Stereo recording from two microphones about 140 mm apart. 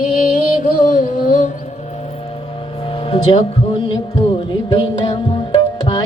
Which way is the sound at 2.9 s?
40° left (ahead or behind).